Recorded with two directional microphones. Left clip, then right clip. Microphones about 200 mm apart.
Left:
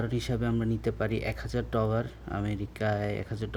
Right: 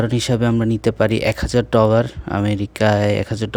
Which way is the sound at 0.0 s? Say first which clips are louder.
Right 13 dB; 50° right (ahead or behind).